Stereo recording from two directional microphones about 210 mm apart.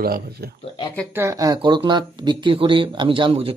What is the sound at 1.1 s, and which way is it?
Speech, 15° right (ahead or behind).